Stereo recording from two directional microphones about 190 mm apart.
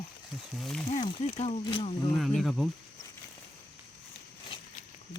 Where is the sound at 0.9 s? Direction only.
35° left (ahead or behind).